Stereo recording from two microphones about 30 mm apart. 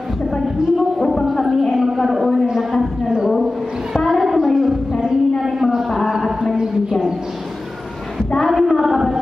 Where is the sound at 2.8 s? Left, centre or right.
Right.